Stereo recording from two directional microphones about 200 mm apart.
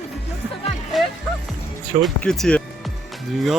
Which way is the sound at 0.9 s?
Centre (ahead or behind).